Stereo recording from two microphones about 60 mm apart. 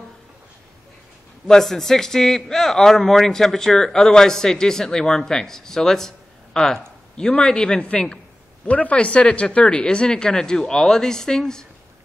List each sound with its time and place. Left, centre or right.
1.5 s a man's voice: centre